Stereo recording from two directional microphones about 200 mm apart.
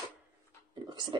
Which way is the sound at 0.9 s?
20° right (ahead or behind).